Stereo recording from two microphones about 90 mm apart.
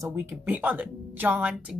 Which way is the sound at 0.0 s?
30° right (ahead or behind).